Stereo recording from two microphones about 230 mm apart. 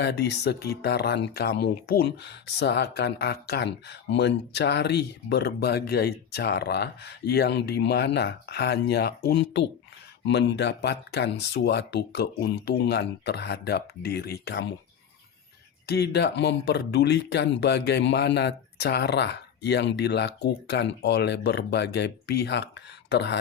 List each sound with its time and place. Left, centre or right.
0.0 s speech: left
15.9 s speech: left